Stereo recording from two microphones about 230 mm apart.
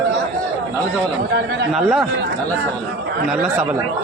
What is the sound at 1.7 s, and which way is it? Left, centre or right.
Speech, centre.